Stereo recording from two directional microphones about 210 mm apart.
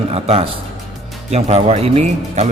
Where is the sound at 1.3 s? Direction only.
30° right (ahead or behind).